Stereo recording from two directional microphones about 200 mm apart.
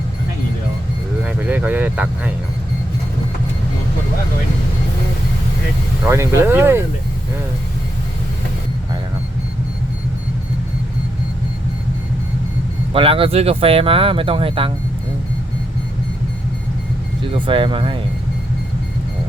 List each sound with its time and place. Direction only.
1.2 s a sound: 5° right (ahead or behind)
6.1 s speech: 15° right (ahead or behind)
12.9 s speech: 25° right (ahead or behind)
17.3 s speech: 25° right (ahead or behind)